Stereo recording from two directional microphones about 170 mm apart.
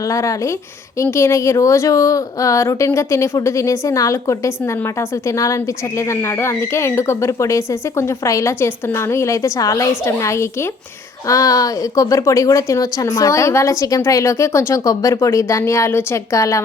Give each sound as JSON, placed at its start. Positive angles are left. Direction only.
{"t": 0.0, "sound": "speech", "side_deg": 20}